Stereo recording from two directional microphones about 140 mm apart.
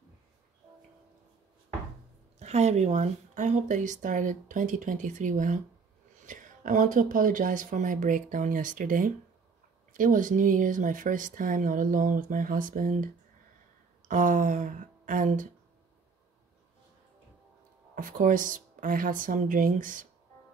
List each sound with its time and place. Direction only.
2.3 s speech: 50° right (ahead or behind); by 15.4 s 65° right (ahead or behind)
17.9 s speech: 70° right (ahead or behind)